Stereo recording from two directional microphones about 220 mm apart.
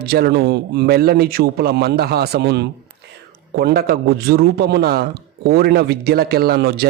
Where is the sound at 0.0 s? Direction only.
45° right (ahead or behind).